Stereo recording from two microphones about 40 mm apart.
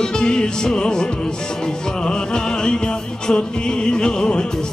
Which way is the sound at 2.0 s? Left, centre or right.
Centre.